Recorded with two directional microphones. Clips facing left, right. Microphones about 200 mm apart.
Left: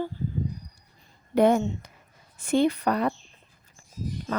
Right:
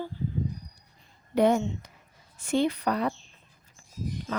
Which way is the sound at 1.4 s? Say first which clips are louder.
Left 2 dB; 50° left (ahead or behind).